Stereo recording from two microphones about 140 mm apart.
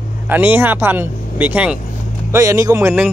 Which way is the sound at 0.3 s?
15° right (ahead or behind).